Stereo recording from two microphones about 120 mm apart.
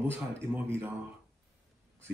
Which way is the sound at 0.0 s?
20° right (ahead or behind).